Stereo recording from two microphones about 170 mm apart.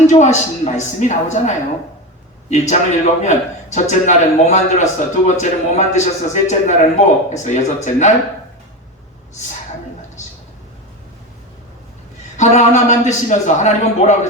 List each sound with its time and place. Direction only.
0.1 s a man's voice: 40° left (ahead or behind)
12.4 s a man's voice: 45° left (ahead or behind)